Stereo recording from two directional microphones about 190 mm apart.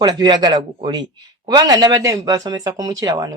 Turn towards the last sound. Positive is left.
turn(degrees=-20)  # may be behind; listen again after turning